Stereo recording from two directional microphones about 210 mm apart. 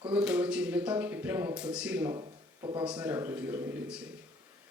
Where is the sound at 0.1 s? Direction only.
5° right (ahead or behind).